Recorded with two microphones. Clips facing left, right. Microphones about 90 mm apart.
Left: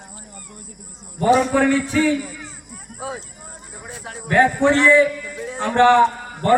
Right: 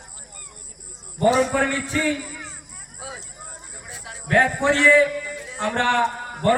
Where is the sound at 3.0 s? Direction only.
40° left (ahead or behind).